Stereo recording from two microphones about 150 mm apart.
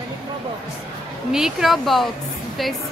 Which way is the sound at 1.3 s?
5° right (ahead or behind).